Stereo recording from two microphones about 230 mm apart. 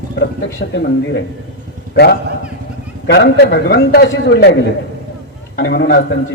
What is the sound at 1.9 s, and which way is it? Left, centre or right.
A man's voice, left.